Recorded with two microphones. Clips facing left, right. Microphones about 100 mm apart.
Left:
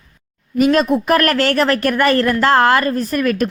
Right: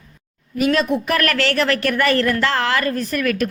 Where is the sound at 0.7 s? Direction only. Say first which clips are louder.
Left 5 dB; 45° left (ahead or behind).